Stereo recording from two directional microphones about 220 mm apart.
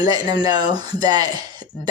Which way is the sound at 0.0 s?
20° right (ahead or behind).